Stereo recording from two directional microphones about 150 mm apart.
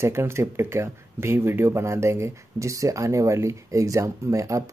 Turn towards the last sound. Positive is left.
turn(degrees=-20)  # may be behind; listen again after turning